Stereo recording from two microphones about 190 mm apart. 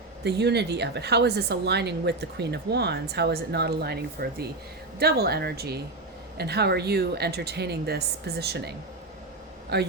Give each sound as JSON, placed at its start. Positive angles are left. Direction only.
{"t": 0.3, "sound": "a woman's voice", "side_deg": -60}
{"t": 9.7, "sound": "a woman's voice", "side_deg": -60}